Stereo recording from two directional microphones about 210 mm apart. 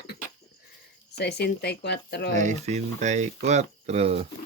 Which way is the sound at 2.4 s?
35° right (ahead or behind).